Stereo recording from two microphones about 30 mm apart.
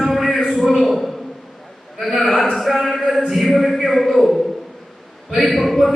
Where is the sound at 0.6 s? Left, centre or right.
Centre.